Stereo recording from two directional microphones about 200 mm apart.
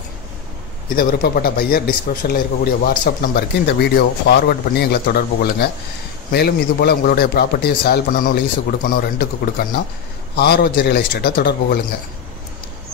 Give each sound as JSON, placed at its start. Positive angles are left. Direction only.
{"t": 0.8, "sound": "speech", "side_deg": 45}